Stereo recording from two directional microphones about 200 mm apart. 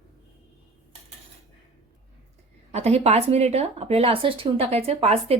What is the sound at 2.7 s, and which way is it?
A woman's voice, 30° right (ahead or behind).